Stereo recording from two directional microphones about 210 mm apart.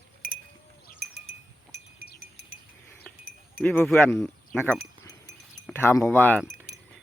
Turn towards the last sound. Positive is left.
turn(degrees=10)  # may be behind; listen again after turning